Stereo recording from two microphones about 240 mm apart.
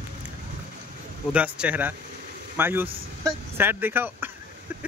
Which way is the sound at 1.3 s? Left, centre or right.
Centre.